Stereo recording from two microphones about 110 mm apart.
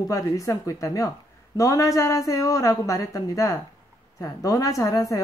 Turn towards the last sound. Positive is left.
turn(degrees=30)  # may be behind; listen again after turning